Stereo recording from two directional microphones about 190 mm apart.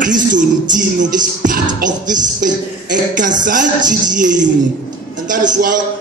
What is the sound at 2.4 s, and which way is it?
Music, 45° right (ahead or behind).